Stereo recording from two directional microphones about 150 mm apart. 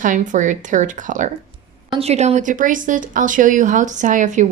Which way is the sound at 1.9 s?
45° right (ahead or behind).